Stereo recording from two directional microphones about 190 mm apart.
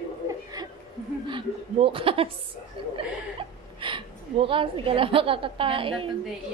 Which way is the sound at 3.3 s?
25° right (ahead or behind).